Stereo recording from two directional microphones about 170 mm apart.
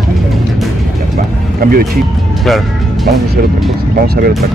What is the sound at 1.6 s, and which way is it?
Speech, 60° right (ahead or behind).